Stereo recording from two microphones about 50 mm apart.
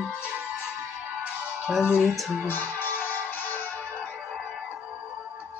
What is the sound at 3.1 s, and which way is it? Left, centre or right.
Music, left.